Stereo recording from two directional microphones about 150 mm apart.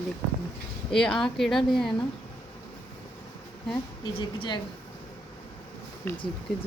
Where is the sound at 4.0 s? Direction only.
30° left (ahead or behind).